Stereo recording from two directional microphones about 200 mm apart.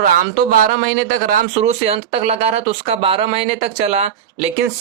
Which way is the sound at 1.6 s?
30° right (ahead or behind).